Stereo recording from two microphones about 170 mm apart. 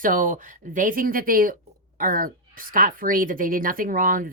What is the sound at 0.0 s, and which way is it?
A woman's voice, 50° right (ahead or behind).